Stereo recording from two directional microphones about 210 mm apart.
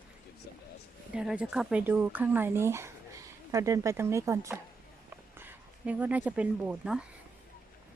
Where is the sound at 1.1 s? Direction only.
5° right (ahead or behind).